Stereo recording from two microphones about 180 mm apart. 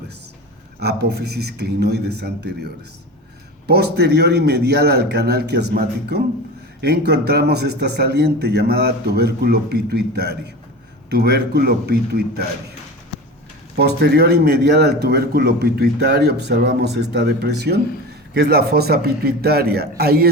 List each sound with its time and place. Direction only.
0.8 s speech: 65° right (ahead or behind)
3.7 s speech: 65° right (ahead or behind)
13.7 s speech: 65° right (ahead or behind)